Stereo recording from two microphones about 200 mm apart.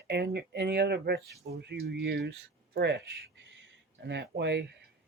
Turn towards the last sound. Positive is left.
turn(degrees=-55)  # may be behind; listen again after turning